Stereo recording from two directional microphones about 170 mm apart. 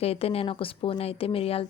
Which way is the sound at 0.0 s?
35° left (ahead or behind).